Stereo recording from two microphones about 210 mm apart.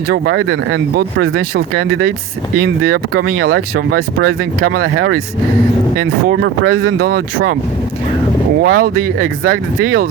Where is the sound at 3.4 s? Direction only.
60° right (ahead or behind).